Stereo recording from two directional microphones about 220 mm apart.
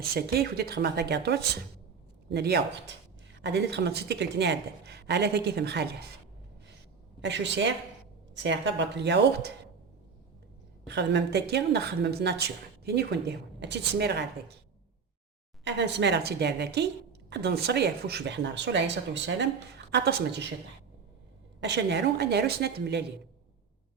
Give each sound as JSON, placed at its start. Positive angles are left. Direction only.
{"t": 0.1, "sound": "speech", "side_deg": -45}
{"t": 7.2, "sound": "speech", "side_deg": -55}
{"t": 10.8, "sound": "speech", "side_deg": -50}
{"t": 15.6, "sound": "speech", "side_deg": -50}
{"t": 21.6, "sound": "speech", "side_deg": -50}